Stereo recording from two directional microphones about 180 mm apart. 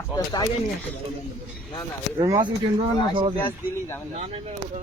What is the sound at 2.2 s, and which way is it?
Speech, 20° right (ahead or behind).